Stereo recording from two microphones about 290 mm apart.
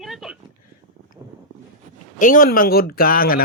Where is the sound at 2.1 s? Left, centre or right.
Left.